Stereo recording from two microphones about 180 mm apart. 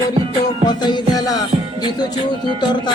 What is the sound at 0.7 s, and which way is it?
Music, 25° left (ahead or behind).